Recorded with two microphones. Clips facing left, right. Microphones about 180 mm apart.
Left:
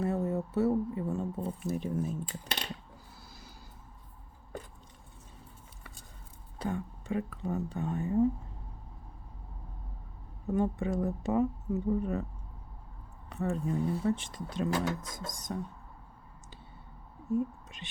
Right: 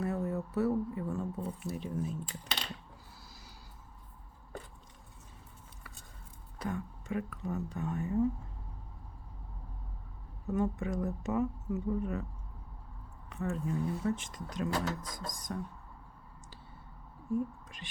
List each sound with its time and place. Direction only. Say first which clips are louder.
0.0 s speech: left 3 dB; 25° left (ahead or behind)
1.6 s speech: left 5 dB; 50° left (ahead or behind)
6.6 s speech: left 3 dB; 30° left (ahead or behind)
10.4 s speech: left 2 dB; 30° left (ahead or behind)
13.3 s speech: left 3 dB; 35° left (ahead or behind)
17.3 s speech: left 3 dB; 25° left (ahead or behind)